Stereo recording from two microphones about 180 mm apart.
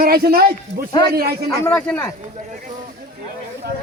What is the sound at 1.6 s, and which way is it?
Speech, 5° left (ahead or behind).